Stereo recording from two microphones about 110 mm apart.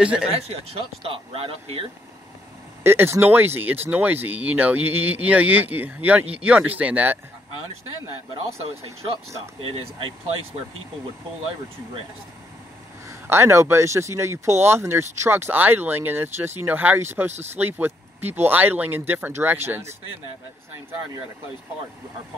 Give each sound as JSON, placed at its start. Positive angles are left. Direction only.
{"t": 0.0, "sound": "speech", "side_deg": -10}
{"t": 0.3, "sound": "speech", "side_deg": -70}
{"t": 2.8, "sound": "speech", "side_deg": -20}
{"t": 9.6, "sound": "speech", "side_deg": -55}
{"t": 13.1, "sound": "speech", "side_deg": -20}